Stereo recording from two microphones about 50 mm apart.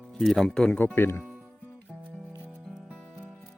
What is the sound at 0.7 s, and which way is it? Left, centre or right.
Speech, left.